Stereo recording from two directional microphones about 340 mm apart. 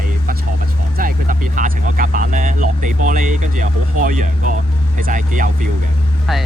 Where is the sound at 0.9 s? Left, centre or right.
Right.